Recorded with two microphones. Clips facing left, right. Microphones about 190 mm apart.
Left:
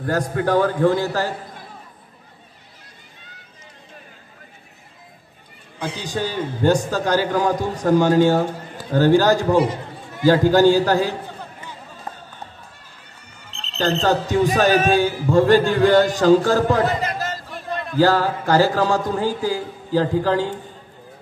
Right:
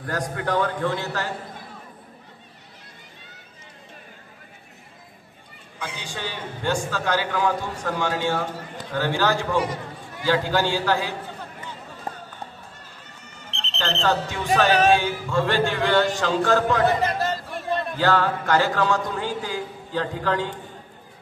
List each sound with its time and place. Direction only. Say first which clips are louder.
0.0 s a man's voice: left 6 dB; 30° left (ahead or behind)
5.8 s a man's voice: left 8 dB; 40° left (ahead or behind)
13.7 s a man's voice: left 5 dB; 40° left (ahead or behind)
17.9 s a man's voice: left 6 dB; 35° left (ahead or behind)